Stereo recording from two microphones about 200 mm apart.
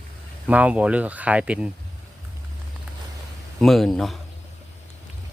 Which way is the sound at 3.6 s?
Centre (ahead or behind).